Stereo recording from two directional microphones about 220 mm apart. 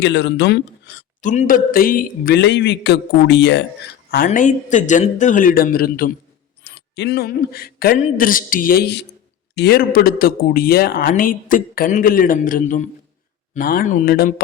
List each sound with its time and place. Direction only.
0.0 s speech: 50° left (ahead or behind)
1.2 s speech: 35° left (ahead or behind); by 3.6 s 50° left (ahead or behind)
4.3 s speech: 35° left (ahead or behind)